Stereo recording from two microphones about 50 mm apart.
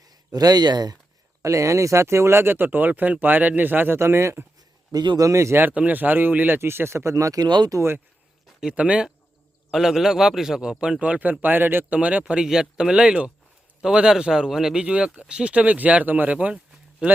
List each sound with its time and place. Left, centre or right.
1.4 s speech: right
3.9 s speech: right
5.2 s speech: right
5.7 s speech: right
6.6 s speech: right
8.7 s speech: right
9.7 s a man's voice: centre; by 11.3 s right
11.4 s speech: right
11.9 s speech: right
12.2 s a man's voice: centre
14.8 s speech: centre